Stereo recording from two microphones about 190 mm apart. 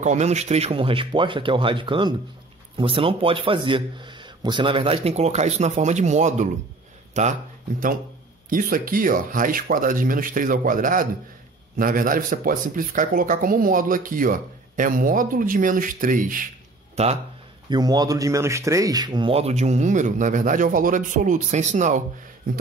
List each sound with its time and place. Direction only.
0.0 s a man's voice: 35° right (ahead or behind)
8.5 s speech: 50° right (ahead or behind)
16.9 s speech: 35° right (ahead or behind)
17.6 s speech: 20° right (ahead or behind); by 22.0 s 40° right (ahead or behind)